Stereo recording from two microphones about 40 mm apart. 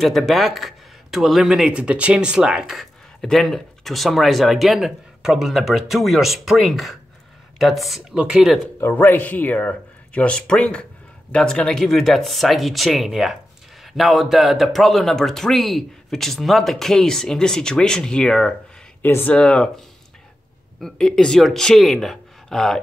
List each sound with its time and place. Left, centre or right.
0.3 s speech: centre
1.7 s speech: right
3.2 s speech: centre
8.2 s speech: centre
8.9 s speech: left
9.6 s speech: left
11.4 s speech: centre
19.3 s speech: left
20.8 s speech: centre
21.4 s speech: centre
22.0 s a sound: centre